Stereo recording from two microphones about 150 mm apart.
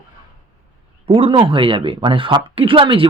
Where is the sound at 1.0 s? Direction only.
40° right (ahead or behind).